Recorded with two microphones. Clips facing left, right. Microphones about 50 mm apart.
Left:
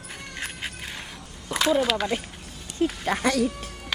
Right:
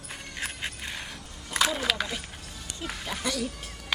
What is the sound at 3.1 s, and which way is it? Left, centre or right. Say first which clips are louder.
Speech: left 6 dB; left.